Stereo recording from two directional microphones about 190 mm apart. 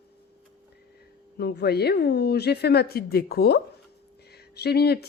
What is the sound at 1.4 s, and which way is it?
A woman's voice, 60° left (ahead or behind).